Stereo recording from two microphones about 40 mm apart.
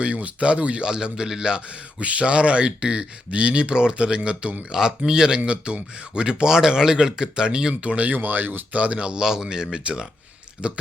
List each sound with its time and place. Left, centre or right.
0.0 s speech: right
0.9 s speech: centre
2.0 s speech: right
7.7 s speech: right
8.1 s speech: right
8.7 s speech: right
9.0 s speech: right